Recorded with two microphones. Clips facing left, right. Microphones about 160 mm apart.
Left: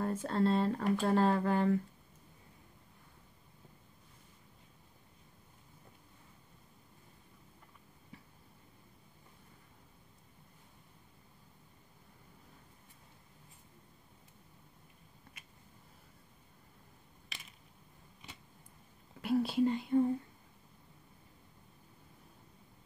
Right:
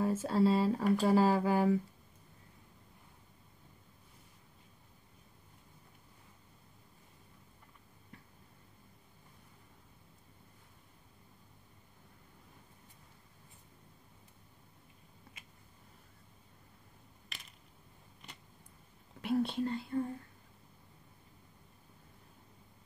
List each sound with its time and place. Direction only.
0.0 s speech: 5° right (ahead or behind)
8.1 s a sound: 5° left (ahead or behind)
17.3 s mechanisms: centre (ahead or behind)
19.2 s speech: centre (ahead or behind); by 20.1 s 20° left (ahead or behind)